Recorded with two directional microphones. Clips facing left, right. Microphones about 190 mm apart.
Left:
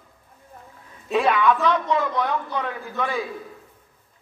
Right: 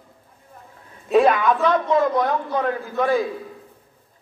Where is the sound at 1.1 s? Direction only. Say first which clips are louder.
Right 3 dB; 40° right (ahead or behind).